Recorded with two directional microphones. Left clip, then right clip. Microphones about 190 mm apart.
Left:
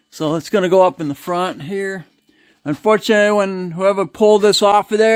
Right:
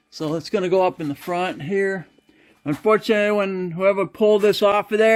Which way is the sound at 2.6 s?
30° left (ahead or behind).